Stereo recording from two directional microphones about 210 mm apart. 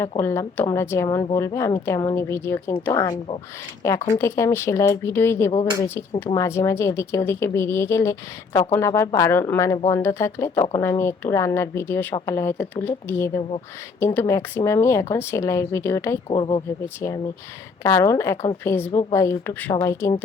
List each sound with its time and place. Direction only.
0.2 s speech: 10° left (ahead or behind)
16.3 s speech: 25° left (ahead or behind)